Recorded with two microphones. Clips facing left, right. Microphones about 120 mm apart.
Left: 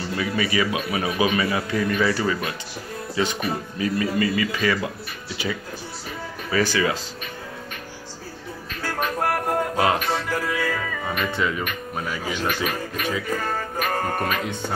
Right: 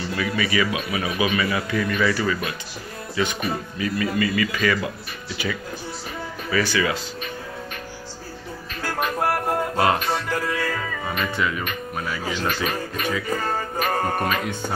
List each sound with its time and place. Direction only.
0.2 s a man's voice: 30° left (ahead or behind)
6.5 s a man's voice: 35° left (ahead or behind)
8.8 s music: 10° right (ahead or behind)
11.3 s a man's voice: 30° left (ahead or behind)
12.3 s a man's voice: 10° left (ahead or behind)
13.0 s speech: 5° right (ahead or behind)